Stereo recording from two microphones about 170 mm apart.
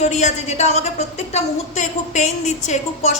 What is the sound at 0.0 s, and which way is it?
A woman's voice, 45° left (ahead or behind).